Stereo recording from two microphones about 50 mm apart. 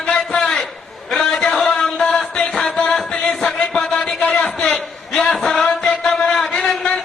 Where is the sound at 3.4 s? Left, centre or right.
Centre.